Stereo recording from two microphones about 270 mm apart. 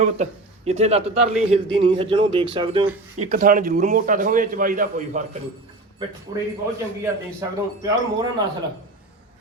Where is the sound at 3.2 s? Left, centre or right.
Right.